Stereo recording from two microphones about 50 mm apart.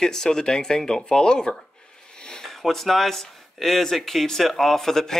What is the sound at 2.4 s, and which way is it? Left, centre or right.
Speech, centre.